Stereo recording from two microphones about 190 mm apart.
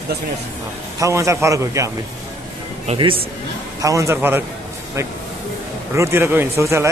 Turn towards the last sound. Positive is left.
turn(degrees=-15)  # may be behind; listen again after turning